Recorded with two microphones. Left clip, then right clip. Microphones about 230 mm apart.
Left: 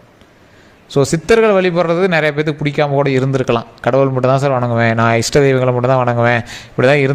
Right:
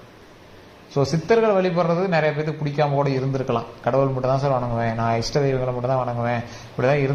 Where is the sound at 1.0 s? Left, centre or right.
Left.